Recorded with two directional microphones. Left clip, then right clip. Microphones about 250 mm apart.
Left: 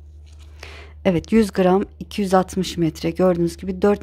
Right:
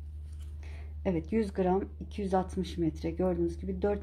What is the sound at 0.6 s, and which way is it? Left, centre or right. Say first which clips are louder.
Speech: left 17 dB; left.